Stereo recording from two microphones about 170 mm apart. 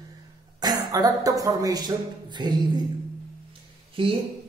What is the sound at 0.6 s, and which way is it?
Speech, 20° right (ahead or behind).